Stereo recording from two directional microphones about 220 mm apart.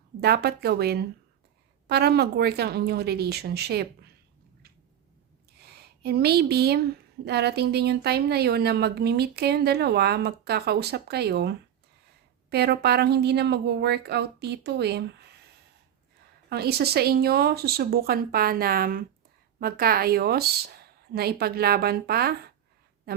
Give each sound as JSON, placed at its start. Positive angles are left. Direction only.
{"t": 0.2, "sound": "a woman's voice", "side_deg": -45}
{"t": 5.5, "sound": "a woman's voice", "side_deg": -45}
{"t": 16.5, "sound": "a woman's voice", "side_deg": -45}